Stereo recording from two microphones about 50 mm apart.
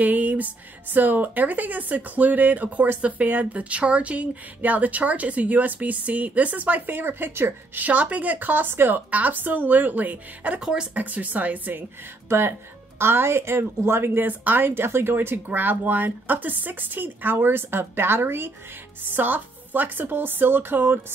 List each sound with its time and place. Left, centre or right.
0.0 s speech: right
7.8 s speech: right
10.6 s speech: centre
11.0 s speech: right
12.3 s a woman's voice: right
14.7 s speech: right
19.0 s speech: right